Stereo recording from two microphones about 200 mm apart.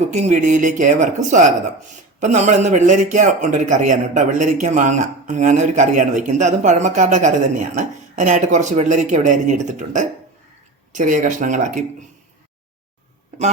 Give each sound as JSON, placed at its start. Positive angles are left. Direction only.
{"t": 0.1, "sound": "a man's voice", "side_deg": -35}